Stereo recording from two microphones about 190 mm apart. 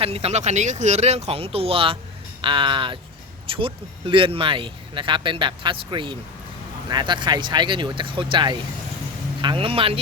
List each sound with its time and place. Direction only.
0.0 s speech: 30° right (ahead or behind)